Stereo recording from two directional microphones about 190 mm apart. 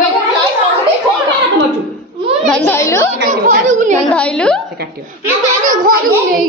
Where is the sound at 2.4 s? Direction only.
5° left (ahead or behind).